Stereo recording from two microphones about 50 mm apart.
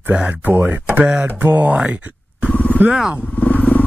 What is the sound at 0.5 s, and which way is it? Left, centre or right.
Speech, right.